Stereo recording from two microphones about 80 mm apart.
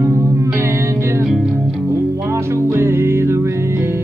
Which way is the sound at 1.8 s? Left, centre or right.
Right.